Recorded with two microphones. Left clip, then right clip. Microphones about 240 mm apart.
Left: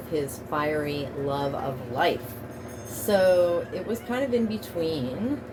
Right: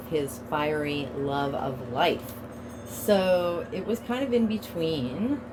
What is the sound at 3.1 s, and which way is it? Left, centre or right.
Speech, right.